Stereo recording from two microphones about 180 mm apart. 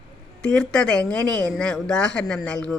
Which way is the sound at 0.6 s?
5° left (ahead or behind).